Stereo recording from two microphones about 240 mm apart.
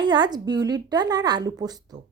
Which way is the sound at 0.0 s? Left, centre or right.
Centre.